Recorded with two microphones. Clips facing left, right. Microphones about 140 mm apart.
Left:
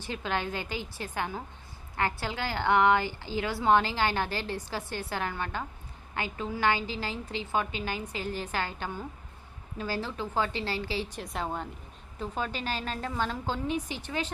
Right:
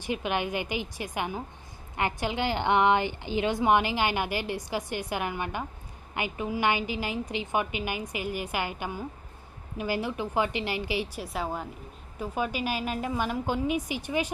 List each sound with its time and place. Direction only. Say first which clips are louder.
0.0 s a woman's voice: right 3 dB; 15° right (ahead or behind)